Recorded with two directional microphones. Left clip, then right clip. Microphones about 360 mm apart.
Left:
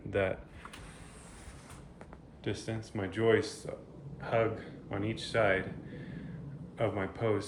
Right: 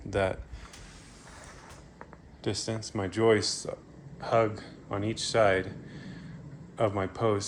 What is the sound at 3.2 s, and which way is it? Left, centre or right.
A man's voice, centre.